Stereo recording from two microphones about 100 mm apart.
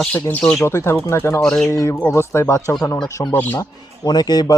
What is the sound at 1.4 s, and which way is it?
Speech, 10° left (ahead or behind).